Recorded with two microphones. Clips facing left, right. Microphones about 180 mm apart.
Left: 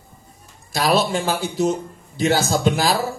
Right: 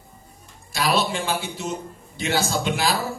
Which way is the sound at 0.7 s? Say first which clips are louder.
Left 4 dB; 40° left (ahead or behind).